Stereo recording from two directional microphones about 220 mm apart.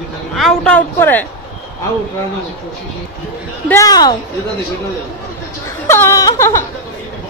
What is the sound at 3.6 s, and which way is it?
Speech, 15° left (ahead or behind).